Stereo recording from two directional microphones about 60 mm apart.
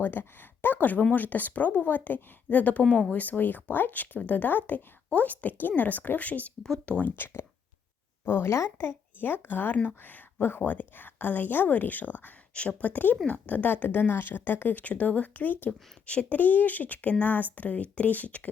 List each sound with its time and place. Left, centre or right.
0.0 s speech: left
8.2 s speech: left